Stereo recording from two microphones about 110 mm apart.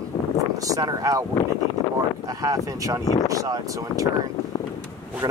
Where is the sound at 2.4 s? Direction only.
30° right (ahead or behind).